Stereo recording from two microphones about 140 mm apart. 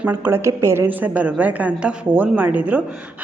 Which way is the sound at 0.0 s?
15° right (ahead or behind).